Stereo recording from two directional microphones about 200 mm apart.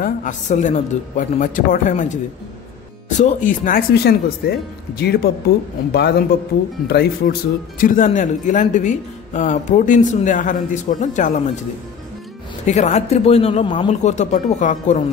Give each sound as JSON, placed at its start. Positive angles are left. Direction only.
{"t": 0.0, "sound": "speech", "side_deg": 40}
{"t": 7.8, "sound": "speech", "side_deg": 40}
{"t": 12.6, "sound": "speech", "side_deg": 35}